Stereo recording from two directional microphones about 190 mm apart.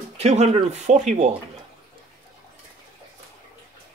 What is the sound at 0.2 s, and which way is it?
Speech, 35° right (ahead or behind).